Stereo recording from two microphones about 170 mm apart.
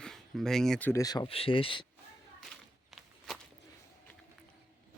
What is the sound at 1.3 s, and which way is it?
Speech, 35° left (ahead or behind).